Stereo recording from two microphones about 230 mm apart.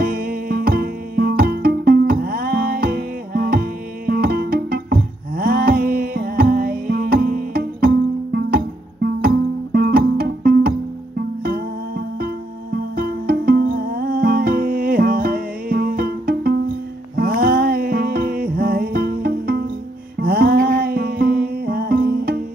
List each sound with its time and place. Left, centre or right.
0.0 s music: right
12.7 s music: right